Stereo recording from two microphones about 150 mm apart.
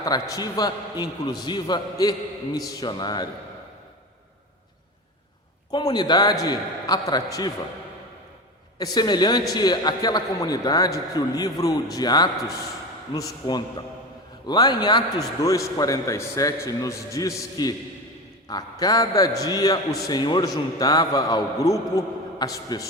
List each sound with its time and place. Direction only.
0.0 s a man's voice: 25° left (ahead or behind)
5.7 s a man's voice: 30° left (ahead or behind)
8.8 s a man's voice: 25° left (ahead or behind)
14.4 s a man's voice: 25° left (ahead or behind)